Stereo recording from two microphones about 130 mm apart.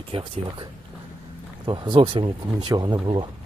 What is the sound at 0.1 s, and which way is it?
Speech, 45° right (ahead or behind).